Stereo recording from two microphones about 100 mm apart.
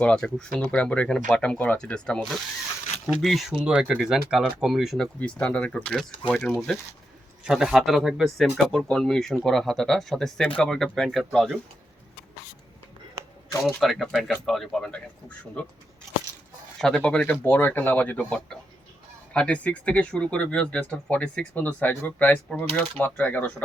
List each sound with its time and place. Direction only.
0.0 s speech: 10° left (ahead or behind)
5.2 s speech: 10° left (ahead or behind)
7.4 s speech: 5° right (ahead or behind)
13.7 s speech: centre (ahead or behind)
16.8 s speech: 10° left (ahead or behind)